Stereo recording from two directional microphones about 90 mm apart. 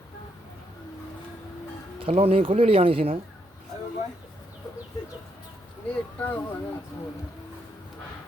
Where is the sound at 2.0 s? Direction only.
90° right.